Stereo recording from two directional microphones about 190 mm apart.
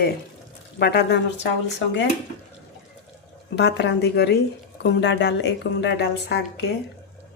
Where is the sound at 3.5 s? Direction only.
65° left (ahead or behind).